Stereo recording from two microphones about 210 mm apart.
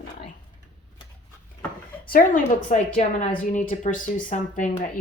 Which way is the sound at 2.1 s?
40° left (ahead or behind).